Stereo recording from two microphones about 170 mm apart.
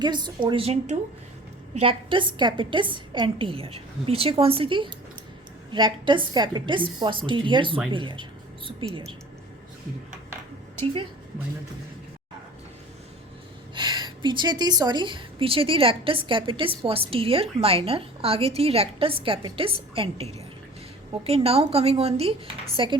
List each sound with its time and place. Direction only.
0.0 s a woman's voice: 25° right (ahead or behind)
13.7 s a woman's voice: 25° right (ahead or behind)